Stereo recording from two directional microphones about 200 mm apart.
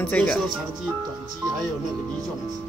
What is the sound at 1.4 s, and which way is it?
Speech, 20° right (ahead or behind).